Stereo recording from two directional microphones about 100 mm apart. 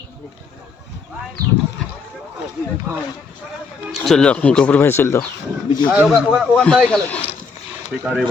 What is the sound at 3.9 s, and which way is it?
Speech, 5° left (ahead or behind).